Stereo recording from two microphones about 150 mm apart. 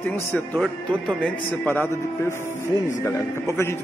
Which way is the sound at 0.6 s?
Centre (ahead or behind).